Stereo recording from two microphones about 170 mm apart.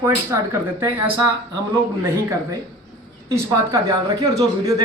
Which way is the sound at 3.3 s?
20° right (ahead or behind).